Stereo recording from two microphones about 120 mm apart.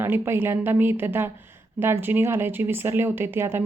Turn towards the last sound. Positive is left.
turn(degrees=-20)  # may be behind; listen again after turning